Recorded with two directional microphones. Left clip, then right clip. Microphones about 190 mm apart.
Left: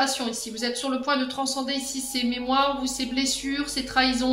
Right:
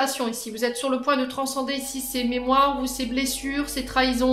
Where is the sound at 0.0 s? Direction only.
50° right (ahead or behind).